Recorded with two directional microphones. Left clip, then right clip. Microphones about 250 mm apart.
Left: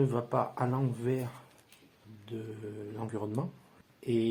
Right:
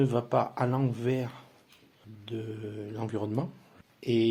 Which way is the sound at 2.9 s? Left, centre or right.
Right.